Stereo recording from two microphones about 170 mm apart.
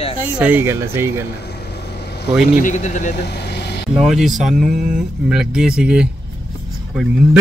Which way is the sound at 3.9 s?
Centre (ahead or behind).